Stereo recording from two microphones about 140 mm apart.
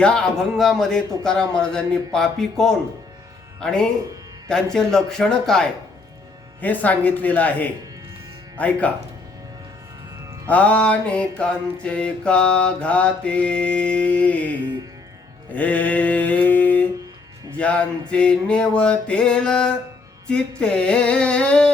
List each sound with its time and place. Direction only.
0.0 s a man's voice: 5° left (ahead or behind)
6.6 s mantra: 10° left (ahead or behind)
10.5 s mantra: 10° left (ahead or behind)
15.5 s mantra: 10° left (ahead or behind)